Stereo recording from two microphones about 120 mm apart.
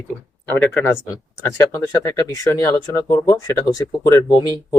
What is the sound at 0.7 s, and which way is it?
Speech, 20° left (ahead or behind).